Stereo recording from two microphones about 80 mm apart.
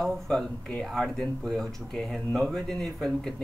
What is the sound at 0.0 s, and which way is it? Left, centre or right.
Speech, centre.